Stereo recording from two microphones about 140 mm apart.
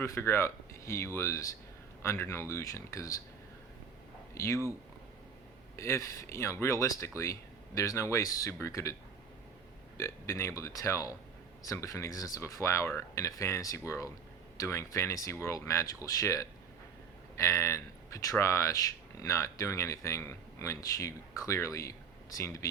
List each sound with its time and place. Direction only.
0.0 s speech: 20° left (ahead or behind)
4.4 s speech: 20° left (ahead or behind)
5.7 s speech: 20° left (ahead or behind)
10.0 s speech: 20° left (ahead or behind)